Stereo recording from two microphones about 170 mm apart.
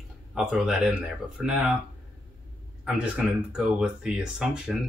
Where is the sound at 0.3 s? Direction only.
Centre (ahead or behind).